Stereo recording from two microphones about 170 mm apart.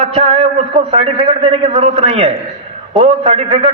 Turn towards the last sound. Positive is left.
turn(degrees=-30)  # may be behind; listen again after turning